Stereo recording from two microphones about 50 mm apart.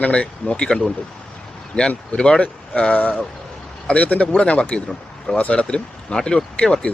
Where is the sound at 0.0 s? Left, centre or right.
Left.